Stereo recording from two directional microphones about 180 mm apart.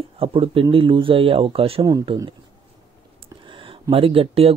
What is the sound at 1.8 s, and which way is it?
Speech, 20° right (ahead or behind).